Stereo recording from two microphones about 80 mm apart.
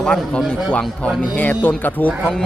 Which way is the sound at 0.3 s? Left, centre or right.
Centre.